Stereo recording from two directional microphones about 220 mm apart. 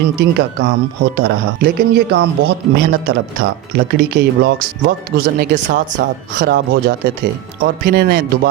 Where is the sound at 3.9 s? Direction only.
45° right (ahead or behind).